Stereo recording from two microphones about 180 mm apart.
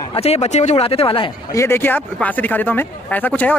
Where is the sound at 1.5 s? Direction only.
15° left (ahead or behind).